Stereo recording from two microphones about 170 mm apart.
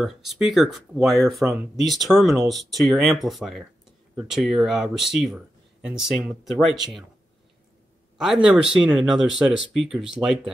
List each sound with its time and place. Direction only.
0.0 s speech: centre (ahead or behind)
1.4 s speech: 15° right (ahead or behind)
1.9 s speech: centre (ahead or behind)
8.2 s speech: centre (ahead or behind)